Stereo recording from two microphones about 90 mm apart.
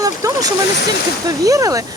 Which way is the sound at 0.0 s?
40° right (ahead or behind).